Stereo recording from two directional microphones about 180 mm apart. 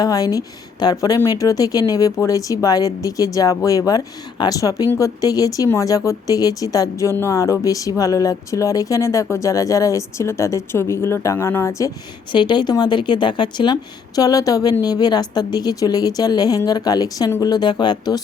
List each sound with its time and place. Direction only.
0.0 s speech: 20° left (ahead or behind)
12.3 s speech: 25° left (ahead or behind)